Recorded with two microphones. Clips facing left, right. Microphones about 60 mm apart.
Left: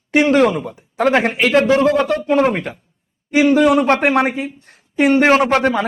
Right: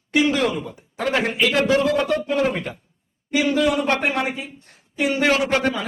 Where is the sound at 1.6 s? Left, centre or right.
Left.